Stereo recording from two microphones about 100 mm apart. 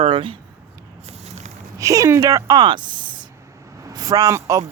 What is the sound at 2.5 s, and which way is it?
Speech, 50° right (ahead or behind).